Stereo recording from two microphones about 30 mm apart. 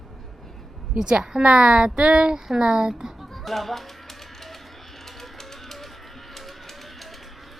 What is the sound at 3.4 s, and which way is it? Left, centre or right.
Speech, centre.